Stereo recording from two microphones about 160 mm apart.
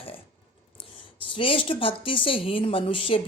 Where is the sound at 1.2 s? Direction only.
35° left (ahead or behind).